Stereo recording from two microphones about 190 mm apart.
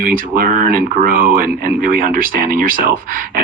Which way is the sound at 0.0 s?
45° right (ahead or behind).